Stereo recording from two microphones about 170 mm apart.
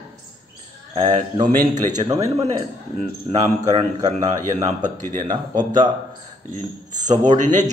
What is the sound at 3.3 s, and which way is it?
A man's voice, 40° right (ahead or behind).